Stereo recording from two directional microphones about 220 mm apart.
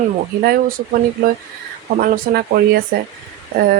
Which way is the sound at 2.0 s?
45° right (ahead or behind).